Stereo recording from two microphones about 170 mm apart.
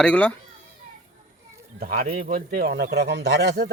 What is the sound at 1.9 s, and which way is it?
Speech, 45° right (ahead or behind).